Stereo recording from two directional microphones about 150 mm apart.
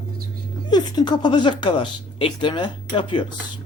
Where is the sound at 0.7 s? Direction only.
30° left (ahead or behind).